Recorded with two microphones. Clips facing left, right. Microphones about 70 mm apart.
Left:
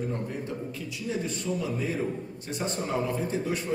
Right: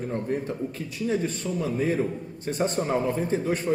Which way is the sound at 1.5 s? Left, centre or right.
Right.